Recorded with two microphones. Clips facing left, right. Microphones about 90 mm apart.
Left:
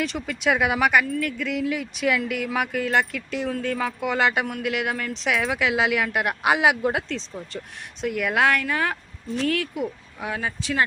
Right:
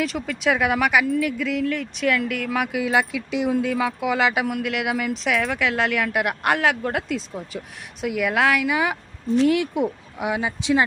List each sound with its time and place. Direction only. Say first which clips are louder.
0.0 s speech: right 2 dB; centre (ahead or behind)
7.1 s speech: right 3 dB; 10° right (ahead or behind)
9.3 s speech: right 6 dB; 20° right (ahead or behind)